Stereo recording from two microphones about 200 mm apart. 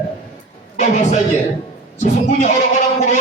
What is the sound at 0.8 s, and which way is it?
Speech, 35° left (ahead or behind).